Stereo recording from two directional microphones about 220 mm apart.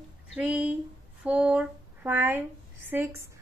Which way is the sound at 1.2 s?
5° right (ahead or behind).